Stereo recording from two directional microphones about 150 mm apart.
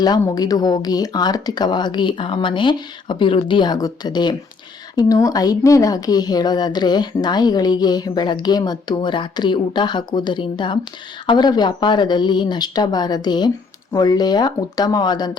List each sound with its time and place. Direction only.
0.0 s speech: 25° left (ahead or behind)